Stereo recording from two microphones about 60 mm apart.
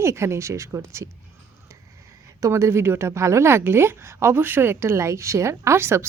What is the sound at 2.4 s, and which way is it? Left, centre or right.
A woman's voice, right.